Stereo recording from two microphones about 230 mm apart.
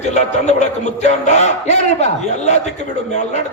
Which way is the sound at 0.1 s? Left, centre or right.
Left.